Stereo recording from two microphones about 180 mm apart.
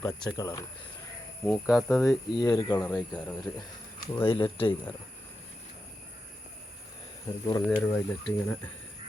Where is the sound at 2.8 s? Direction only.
5° left (ahead or behind).